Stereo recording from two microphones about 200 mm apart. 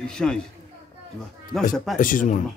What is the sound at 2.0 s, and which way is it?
Speech, 45° left (ahead or behind).